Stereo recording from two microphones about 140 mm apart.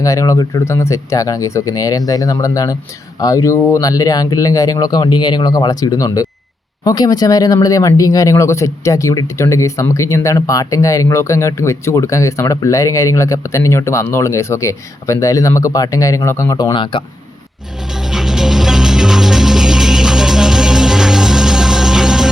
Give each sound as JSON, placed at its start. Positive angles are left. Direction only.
{"t": 0.0, "sound": "speech", "side_deg": 25}
{"t": 17.9, "sound": "music", "side_deg": 0}